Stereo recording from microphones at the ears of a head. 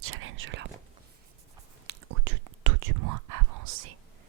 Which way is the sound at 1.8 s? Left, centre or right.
Right.